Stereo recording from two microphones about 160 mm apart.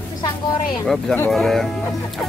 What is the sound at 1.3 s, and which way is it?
Speech, centre (ahead or behind).